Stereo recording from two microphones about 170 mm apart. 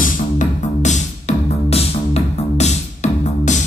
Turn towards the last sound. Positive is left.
turn(degrees=45)  # may be behind; listen again after turning